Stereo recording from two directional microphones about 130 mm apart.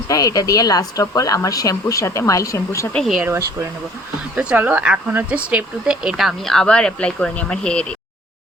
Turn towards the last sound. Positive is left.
turn(degrees=10)  # may be behind; listen again after turning